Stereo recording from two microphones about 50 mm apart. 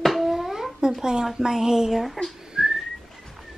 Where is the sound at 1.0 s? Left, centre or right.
Centre.